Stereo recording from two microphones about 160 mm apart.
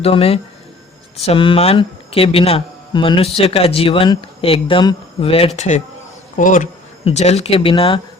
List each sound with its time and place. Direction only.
0.0 s speech: 40° left (ahead or behind)
7.0 s speech: 45° left (ahead or behind)